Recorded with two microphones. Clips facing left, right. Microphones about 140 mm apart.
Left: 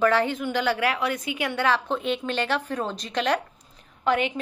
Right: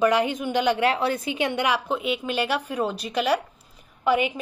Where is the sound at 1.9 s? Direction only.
5° right (ahead or behind).